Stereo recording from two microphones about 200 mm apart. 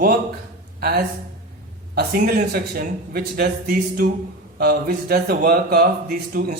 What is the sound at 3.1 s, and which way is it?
Speech, 50° right (ahead or behind).